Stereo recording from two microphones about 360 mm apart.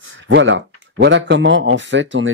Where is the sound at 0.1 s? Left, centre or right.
Right.